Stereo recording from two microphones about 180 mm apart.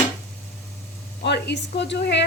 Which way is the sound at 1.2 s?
70° left (ahead or behind).